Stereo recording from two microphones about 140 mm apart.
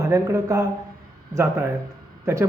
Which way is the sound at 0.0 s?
20° right (ahead or behind).